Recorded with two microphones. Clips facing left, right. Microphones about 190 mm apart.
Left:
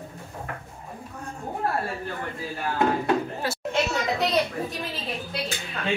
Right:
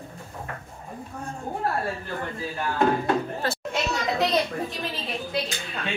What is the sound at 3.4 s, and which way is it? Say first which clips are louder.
Chatter: right 1 dB; 10° left (ahead or behind).